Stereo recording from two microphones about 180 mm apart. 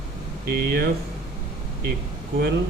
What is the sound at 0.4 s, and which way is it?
Speech, 65° right (ahead or behind).